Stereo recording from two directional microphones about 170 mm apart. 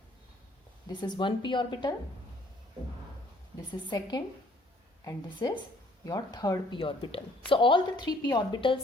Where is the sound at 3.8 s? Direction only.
25° left (ahead or behind).